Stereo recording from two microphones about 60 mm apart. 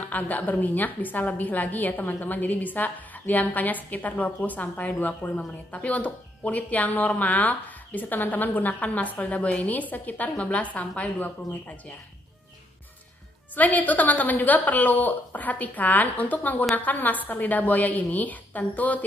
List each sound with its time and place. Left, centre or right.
0.1 s speech: left
13.6 s speech: left